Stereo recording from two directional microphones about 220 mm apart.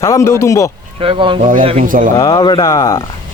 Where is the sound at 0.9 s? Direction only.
25° right (ahead or behind).